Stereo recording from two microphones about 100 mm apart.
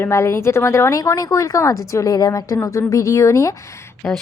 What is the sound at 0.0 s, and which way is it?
A woman's voice, 25° left (ahead or behind).